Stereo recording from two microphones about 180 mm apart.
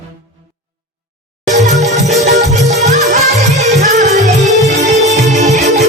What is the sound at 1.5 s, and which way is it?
Music, 40° right (ahead or behind).